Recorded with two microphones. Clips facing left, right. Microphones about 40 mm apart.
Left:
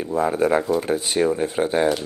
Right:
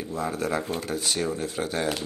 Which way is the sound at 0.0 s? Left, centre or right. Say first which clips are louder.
Left 9 dB; left.